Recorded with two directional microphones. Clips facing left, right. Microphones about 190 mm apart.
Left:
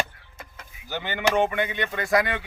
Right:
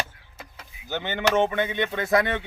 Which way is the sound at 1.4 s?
20° right (ahead or behind).